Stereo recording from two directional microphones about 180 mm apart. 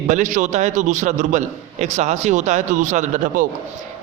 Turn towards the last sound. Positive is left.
turn(degrees=-45)  # may be behind; listen again after turning